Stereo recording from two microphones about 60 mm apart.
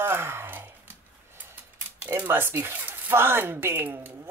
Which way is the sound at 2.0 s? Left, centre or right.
Right.